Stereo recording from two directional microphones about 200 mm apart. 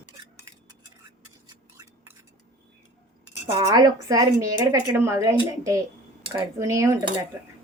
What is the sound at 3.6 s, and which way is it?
A woman's voice, 20° right (ahead or behind).